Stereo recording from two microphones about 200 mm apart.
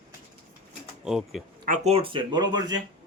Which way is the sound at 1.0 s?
Centre (ahead or behind).